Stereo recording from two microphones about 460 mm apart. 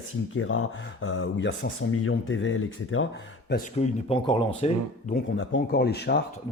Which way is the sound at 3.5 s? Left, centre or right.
Centre.